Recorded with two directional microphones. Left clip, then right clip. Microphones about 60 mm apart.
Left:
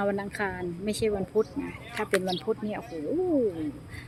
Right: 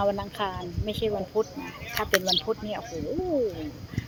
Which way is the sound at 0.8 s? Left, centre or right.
Left.